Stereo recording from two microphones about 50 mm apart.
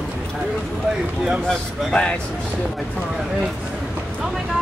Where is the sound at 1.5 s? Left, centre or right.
Centre.